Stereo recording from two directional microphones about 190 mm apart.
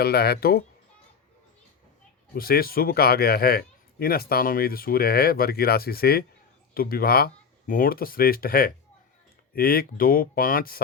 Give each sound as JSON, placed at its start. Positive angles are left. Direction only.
{"t": 0.0, "sound": "speech", "side_deg": 55}
{"t": 2.3, "sound": "a man's voice", "side_deg": 50}